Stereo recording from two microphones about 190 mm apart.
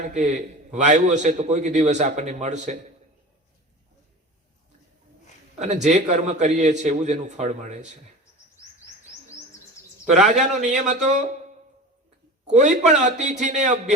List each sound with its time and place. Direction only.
0.0 s a man's voice: 40° right (ahead or behind)
5.5 s a man's voice: 40° right (ahead or behind)
10.1 s a man's voice: 40° right (ahead or behind)
12.5 s a man's voice: 40° right (ahead or behind)